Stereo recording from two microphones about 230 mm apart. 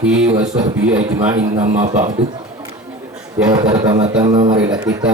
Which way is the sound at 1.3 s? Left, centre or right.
Right.